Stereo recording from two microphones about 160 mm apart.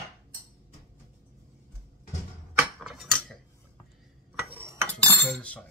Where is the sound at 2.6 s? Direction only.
5° right (ahead or behind).